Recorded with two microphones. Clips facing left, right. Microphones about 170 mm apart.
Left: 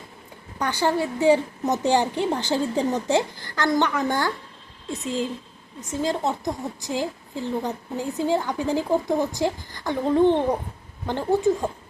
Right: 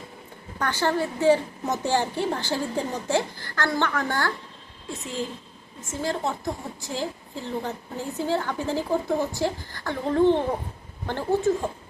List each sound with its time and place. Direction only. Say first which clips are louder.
0.6 s a woman's voice: left 2 dB; 15° left (ahead or behind)
5.9 s a woman's voice: left 3 dB; 20° left (ahead or behind)